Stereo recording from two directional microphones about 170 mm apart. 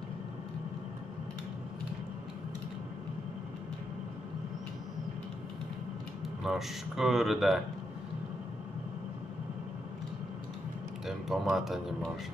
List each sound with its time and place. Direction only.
6.4 s speech: centre (ahead or behind)
11.1 s speech: centre (ahead or behind)